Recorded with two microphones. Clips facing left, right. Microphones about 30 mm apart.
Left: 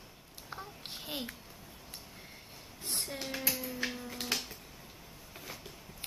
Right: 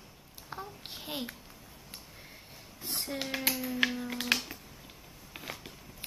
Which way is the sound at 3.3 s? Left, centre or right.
Right.